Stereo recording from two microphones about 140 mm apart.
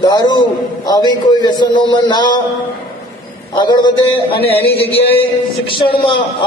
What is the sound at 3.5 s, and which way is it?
Speech, 30° left (ahead or behind).